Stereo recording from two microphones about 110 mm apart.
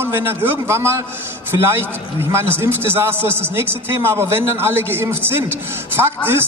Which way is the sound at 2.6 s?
20° right (ahead or behind).